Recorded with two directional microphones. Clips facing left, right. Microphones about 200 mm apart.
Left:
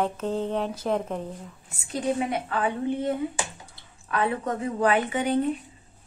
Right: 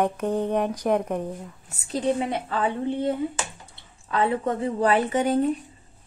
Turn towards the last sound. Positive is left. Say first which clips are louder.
# right 2 dB
turn(degrees=-40)  # may be behind; listen again after turning